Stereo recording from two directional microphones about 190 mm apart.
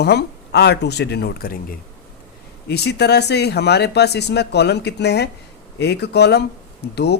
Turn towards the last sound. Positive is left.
turn(degrees=60)  # may be behind; listen again after turning